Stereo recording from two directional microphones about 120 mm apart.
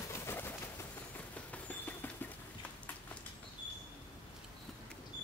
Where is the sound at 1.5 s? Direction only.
15° left (ahead or behind).